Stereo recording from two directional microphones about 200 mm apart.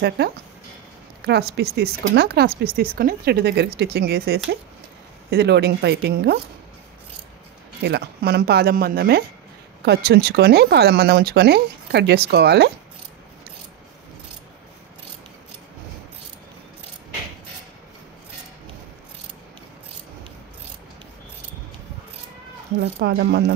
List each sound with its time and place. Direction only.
0.2 s speech: 55° right (ahead or behind)
7.8 s speech: 55° right (ahead or behind)
22.8 s speech: 55° right (ahead or behind)